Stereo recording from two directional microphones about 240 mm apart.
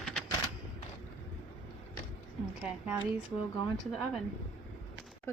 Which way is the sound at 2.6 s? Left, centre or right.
Centre.